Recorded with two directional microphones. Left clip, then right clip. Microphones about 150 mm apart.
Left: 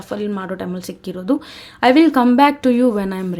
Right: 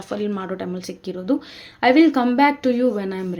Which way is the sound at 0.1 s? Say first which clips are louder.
Left 2 dB; 20° left (ahead or behind).